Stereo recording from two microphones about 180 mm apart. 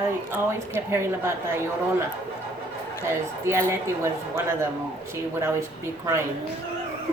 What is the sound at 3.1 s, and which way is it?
Speech, 15° right (ahead or behind).